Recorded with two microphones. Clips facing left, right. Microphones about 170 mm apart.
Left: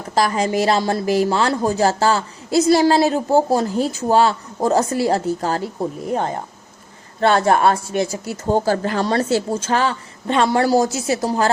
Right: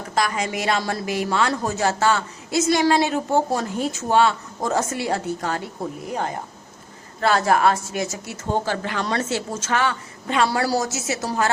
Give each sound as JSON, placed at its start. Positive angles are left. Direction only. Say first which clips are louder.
{"t": 0.1, "sound": "a woman's voice", "louder": "left 6 dB", "side_deg": 35}